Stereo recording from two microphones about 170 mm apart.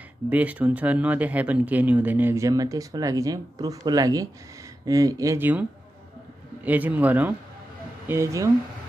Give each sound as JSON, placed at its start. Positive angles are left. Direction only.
{"t": 0.3, "sound": "speech", "side_deg": -10}